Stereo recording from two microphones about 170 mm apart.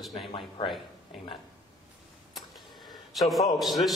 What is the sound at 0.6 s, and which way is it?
Speech, 30° left (ahead or behind).